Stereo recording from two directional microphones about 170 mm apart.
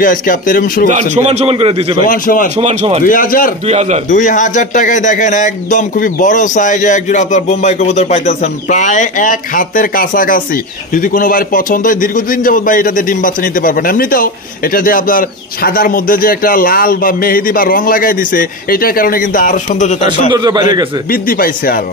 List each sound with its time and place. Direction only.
0.0 s speech: 55° left (ahead or behind)
0.8 s a man's voice: 45° right (ahead or behind)
2.0 s speech: 55° left (ahead or behind)
2.5 s speech: 45° right (ahead or behind)
3.1 s speech: 55° left (ahead or behind)
3.6 s a man's voice: 40° right (ahead or behind)
4.1 s speech: 50° left (ahead or behind)
20.2 s a man's voice: 25° right (ahead or behind)
21.1 s speech: 60° left (ahead or behind)